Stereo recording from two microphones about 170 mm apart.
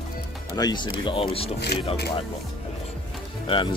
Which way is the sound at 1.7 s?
75° left (ahead or behind).